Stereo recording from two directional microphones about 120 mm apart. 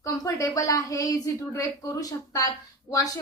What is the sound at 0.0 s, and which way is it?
A woman's voice, 25° left (ahead or behind).